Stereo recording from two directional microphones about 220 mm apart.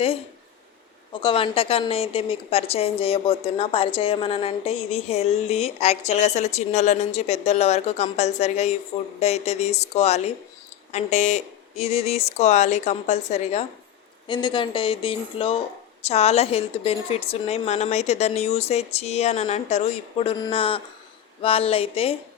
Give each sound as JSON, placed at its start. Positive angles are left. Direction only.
{"t": 1.1, "sound": "a woman's voice", "side_deg": 25}